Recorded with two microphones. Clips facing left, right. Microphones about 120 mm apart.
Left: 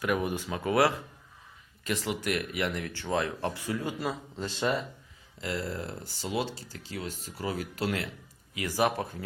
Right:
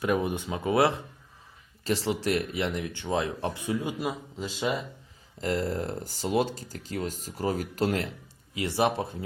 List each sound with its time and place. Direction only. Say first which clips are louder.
0.0 s speech: right 2 dB; 25° right (ahead or behind); by 4.9 s 10° right (ahead or behind)
5.4 s speech: right 5 dB; 45° right (ahead or behind)
8.5 s speech: right 2 dB; 25° right (ahead or behind)